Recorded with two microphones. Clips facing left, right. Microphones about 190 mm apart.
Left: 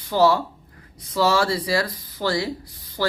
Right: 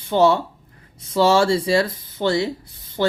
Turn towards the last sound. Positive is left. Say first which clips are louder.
# right 4 dB
turn(degrees=-25)  # may be behind; listen again after turning